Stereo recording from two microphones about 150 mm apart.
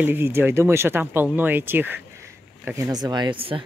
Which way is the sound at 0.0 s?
15° right (ahead or behind).